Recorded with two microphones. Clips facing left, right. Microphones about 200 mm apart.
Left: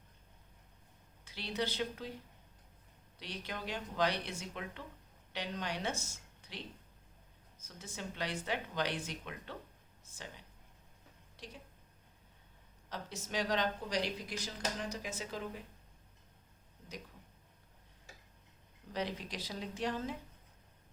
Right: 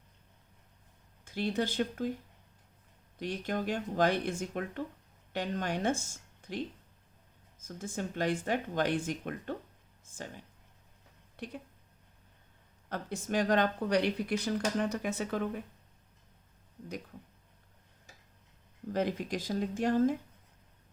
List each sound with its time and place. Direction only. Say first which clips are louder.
1.2 s speech: right 6 dB; 50° right (ahead or behind)
3.2 s speech: right 10 dB; 50° right (ahead or behind)
7.6 s speech: right 8 dB; 50° right (ahead or behind)
12.9 s speech: right 7 dB; 55° right (ahead or behind)
18.9 s speech: right 7 dB; 50° right (ahead or behind)